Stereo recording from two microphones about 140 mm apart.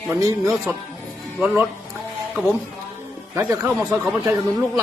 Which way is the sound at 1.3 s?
10° right (ahead or behind).